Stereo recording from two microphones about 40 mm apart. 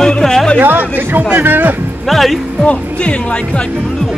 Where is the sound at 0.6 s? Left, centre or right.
Right.